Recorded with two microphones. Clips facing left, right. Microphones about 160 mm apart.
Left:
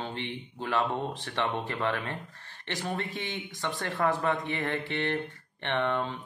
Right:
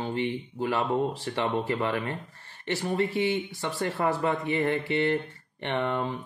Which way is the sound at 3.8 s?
15° right (ahead or behind).